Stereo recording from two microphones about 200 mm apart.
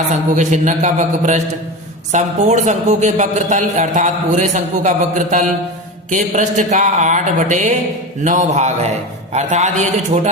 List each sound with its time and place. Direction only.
0.1 s a man's voice: 35° right (ahead or behind)